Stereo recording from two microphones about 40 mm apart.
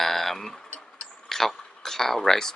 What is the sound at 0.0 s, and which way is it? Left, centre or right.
Tick-tock, centre.